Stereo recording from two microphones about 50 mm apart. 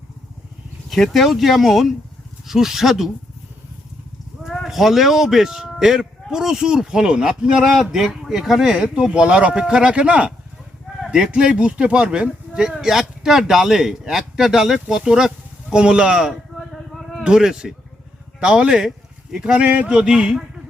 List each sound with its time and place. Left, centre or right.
0.9 s speech: centre
4.6 s speech: centre
16.6 s a sound: centre
17.2 s speech: centre
19.9 s speech: centre